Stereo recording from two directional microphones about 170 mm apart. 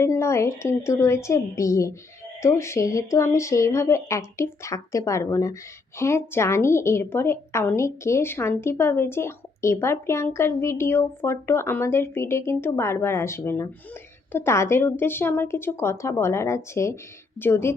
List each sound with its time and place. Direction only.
0.0 s a woman's voice: 15° left (ahead or behind)